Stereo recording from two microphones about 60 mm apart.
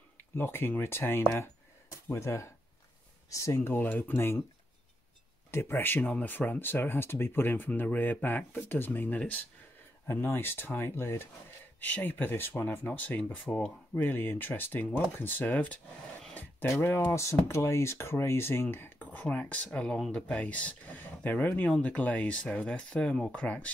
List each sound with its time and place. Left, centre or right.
0.4 s speech: left
2.0 s speech: left
3.5 s speech: left
5.5 s speech: left
11.8 s speech: left
16.8 s speech: left
17.1 s speech: left